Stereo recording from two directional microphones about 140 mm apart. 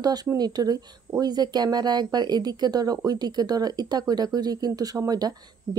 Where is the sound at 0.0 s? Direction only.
30° right (ahead or behind).